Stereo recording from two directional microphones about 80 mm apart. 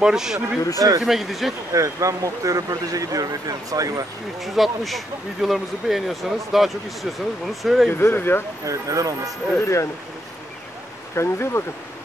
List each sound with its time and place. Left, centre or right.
0.0 s speech: centre
0.7 s speech: right
1.0 s speech: centre
1.7 s speech: right
4.4 s speech: centre
7.9 s speech: left
8.6 s speech: right
9.6 s speech: left
11.1 s speech: left